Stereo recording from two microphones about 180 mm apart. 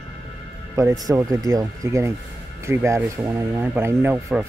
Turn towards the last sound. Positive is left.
turn(degrees=-10)  # may be behind; listen again after turning